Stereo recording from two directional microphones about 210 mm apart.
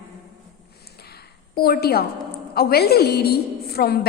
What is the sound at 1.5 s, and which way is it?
A woman's voice, 45° left (ahead or behind).